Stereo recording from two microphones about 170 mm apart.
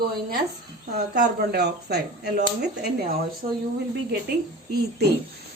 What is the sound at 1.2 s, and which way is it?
A woman's voice, 65° right (ahead or behind).